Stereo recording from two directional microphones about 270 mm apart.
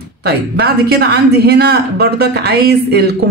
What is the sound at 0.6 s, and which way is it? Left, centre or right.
Speech, right.